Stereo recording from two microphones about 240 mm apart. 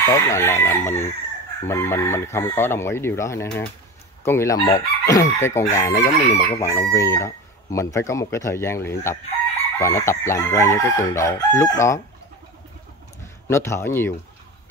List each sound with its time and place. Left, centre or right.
0.0 s crowing: centre
13.5 s crowing: centre